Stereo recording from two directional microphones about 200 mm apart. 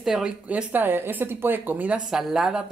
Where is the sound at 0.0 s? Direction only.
5° right (ahead or behind).